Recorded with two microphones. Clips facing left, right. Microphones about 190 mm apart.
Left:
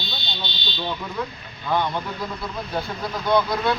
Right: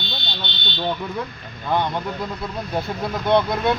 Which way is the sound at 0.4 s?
60° right (ahead or behind).